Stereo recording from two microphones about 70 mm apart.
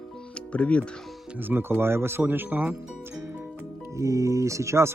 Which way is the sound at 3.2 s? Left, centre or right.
Right.